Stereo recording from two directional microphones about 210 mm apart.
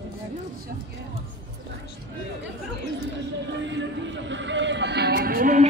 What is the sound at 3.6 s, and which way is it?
Speech, 60° right (ahead or behind).